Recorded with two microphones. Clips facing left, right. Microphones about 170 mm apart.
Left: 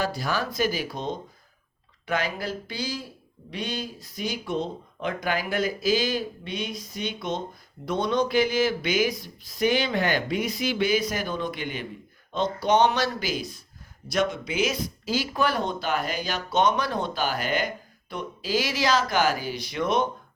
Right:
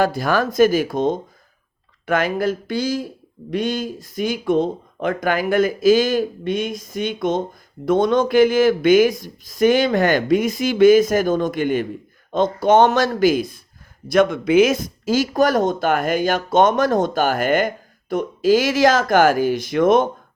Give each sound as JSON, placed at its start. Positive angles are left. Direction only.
{"t": 0.0, "sound": "speech", "side_deg": -50}